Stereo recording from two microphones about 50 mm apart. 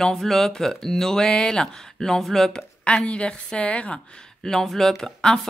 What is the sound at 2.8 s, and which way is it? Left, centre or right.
A woman's voice, left.